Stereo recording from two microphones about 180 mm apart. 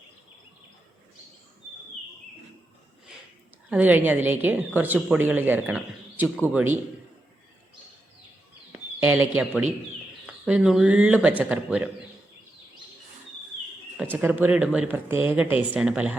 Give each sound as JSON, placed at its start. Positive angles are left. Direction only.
{"t": 3.7, "sound": "a woman's voice", "side_deg": -10}
{"t": 8.7, "sound": "a woman's voice", "side_deg": -10}
{"t": 13.9, "sound": "a woman's voice", "side_deg": -10}